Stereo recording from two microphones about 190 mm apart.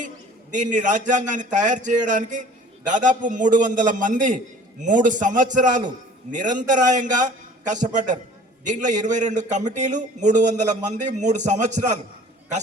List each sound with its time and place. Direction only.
0.5 s a man's voice: 40° right (ahead or behind)